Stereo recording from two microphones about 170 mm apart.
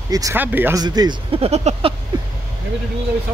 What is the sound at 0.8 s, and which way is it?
Speech, 25° right (ahead or behind).